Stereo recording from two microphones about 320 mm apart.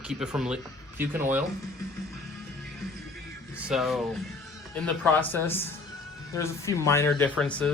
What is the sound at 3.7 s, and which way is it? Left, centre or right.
Speech, centre.